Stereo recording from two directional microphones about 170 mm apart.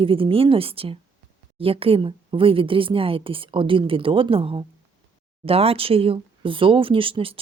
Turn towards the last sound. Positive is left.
turn(degrees=-30)  # may be behind; listen again after turning